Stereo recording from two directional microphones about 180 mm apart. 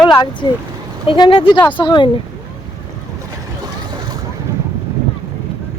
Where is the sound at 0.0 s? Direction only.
25° left (ahead or behind).